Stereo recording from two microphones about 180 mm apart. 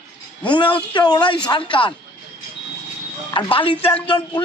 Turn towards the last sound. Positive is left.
turn(degrees=30)  # may be behind; listen again after turning